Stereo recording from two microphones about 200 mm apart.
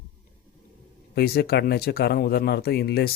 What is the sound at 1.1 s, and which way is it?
Speech, 50° left (ahead or behind).